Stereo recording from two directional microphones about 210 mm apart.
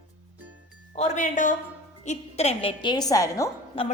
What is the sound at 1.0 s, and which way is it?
A woman's voice, 35° left (ahead or behind).